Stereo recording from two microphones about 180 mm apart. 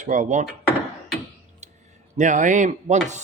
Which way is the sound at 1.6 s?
40° right (ahead or behind).